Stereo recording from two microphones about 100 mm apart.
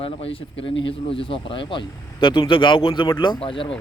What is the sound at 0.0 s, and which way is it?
Speech, 70° left (ahead or behind).